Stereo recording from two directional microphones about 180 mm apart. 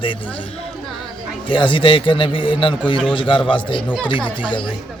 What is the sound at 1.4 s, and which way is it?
A man's voice, 30° left (ahead or behind).